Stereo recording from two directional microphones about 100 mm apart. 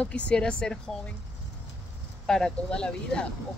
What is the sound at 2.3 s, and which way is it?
Speech, 5° left (ahead or behind).